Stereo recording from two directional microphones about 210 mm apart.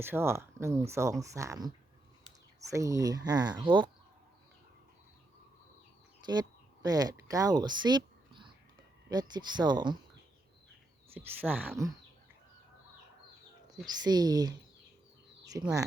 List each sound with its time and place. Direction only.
0.0 s speech: 10° right (ahead or behind)
6.8 s speech: 15° right (ahead or behind)
11.1 s speech: 10° right (ahead or behind)
13.8 s speech: 20° right (ahead or behind)